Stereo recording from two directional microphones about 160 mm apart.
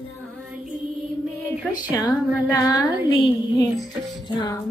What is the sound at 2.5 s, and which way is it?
Music, 20° left (ahead or behind).